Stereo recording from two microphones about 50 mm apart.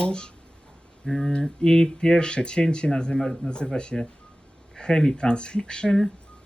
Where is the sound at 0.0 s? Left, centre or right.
Centre.